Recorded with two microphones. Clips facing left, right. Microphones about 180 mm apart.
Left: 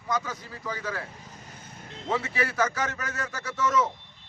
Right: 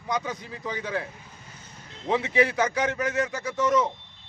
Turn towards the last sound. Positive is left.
turn(degrees=-15)  # may be behind; listen again after turning